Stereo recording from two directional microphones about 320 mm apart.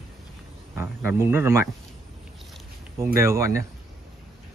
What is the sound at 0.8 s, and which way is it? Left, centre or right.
Speech, centre.